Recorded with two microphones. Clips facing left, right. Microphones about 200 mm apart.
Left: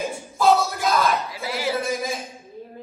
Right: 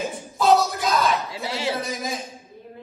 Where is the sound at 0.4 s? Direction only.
Centre (ahead or behind).